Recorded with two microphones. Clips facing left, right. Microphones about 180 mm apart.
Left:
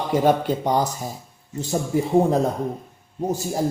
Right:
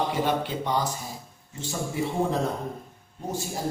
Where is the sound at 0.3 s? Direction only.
45° left (ahead or behind).